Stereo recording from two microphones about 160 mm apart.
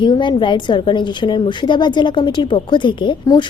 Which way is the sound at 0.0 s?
30° left (ahead or behind).